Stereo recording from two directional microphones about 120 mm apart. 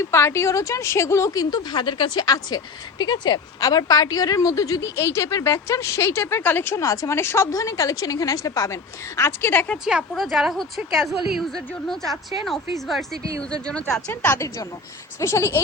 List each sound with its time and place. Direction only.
0.1 s a woman's voice: 25° left (ahead or behind)
10.1 s a woman's voice: centre (ahead or behind)
13.7 s speech: 10° left (ahead or behind)
14.1 s a woman's voice: 20° left (ahead or behind)